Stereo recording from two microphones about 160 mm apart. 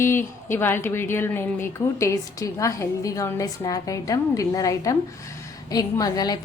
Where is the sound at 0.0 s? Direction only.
15° left (ahead or behind).